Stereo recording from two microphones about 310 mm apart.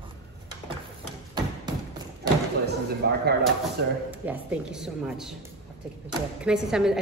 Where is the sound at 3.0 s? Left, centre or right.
Right.